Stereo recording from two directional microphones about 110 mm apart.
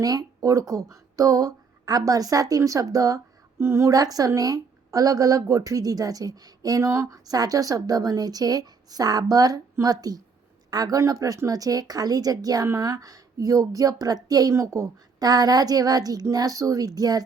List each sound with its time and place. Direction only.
0.0 s a woman's voice: 35° right (ahead or behind)